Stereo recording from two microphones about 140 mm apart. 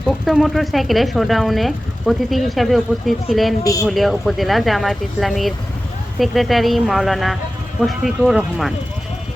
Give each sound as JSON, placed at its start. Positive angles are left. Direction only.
{"t": 0.0, "sound": "speech", "side_deg": 0}
{"t": 3.6, "sound": "speech", "side_deg": 25}
{"t": 3.8, "sound": "speech", "side_deg": 0}